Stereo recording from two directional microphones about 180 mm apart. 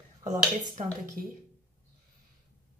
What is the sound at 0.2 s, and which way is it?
Speech, 45° right (ahead or behind).